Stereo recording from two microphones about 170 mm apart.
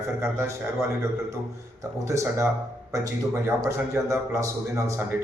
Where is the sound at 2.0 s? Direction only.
15° right (ahead or behind).